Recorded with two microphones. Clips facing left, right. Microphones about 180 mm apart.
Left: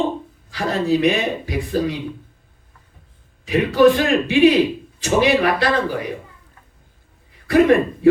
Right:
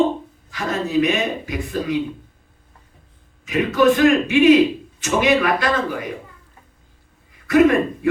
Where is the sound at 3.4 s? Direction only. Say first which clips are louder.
Left 2 dB; 35° left (ahead or behind).